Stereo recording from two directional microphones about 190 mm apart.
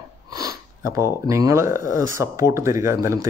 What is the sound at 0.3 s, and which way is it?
Speech, 20° right (ahead or behind).